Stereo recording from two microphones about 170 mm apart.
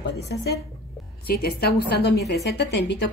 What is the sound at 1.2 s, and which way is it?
A woman's voice, 60° left (ahead or behind).